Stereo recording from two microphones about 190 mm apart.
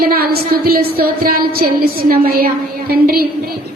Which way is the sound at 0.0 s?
55° right (ahead or behind).